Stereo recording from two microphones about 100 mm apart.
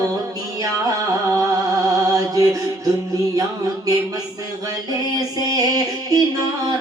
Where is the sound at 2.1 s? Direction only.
35° right (ahead or behind).